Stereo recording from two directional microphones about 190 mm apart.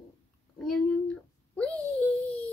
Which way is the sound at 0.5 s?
5° left (ahead or behind).